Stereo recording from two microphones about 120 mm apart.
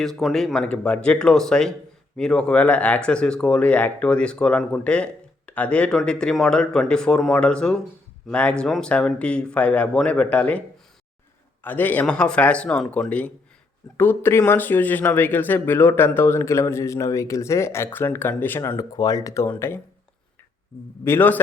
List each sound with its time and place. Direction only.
0.0 s speech: centre (ahead or behind)
11.6 s speech: 15° left (ahead or behind)
21.0 s speech: 20° left (ahead or behind)